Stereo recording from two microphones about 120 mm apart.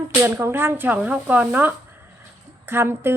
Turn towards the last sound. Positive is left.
turn(degrees=-20)  # may be behind; listen again after turning